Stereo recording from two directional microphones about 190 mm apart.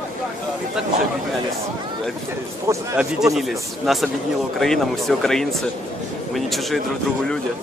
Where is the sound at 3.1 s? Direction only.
Centre (ahead or behind).